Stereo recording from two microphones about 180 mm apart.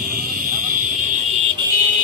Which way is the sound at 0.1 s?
50° right (ahead or behind).